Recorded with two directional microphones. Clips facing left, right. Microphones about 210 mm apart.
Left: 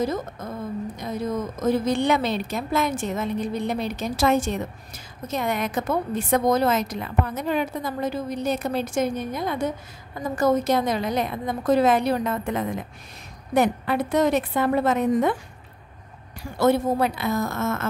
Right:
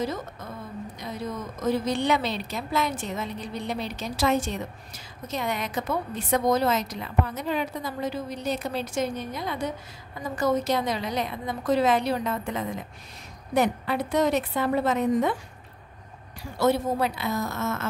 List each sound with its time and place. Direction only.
0.0 s a woman's voice: 45° left (ahead or behind)
16.5 s a woman's voice: 55° left (ahead or behind)